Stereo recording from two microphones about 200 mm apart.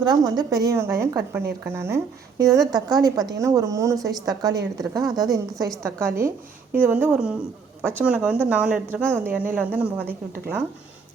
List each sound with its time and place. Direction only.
0.0 s a woman's voice: 20° right (ahead or behind)